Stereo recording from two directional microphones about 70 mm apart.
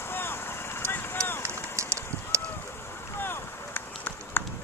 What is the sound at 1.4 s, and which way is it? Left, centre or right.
Run, right.